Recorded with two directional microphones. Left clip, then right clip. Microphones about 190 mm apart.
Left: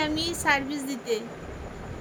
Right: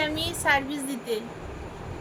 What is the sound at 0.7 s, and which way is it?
Speech, 25° right (ahead or behind).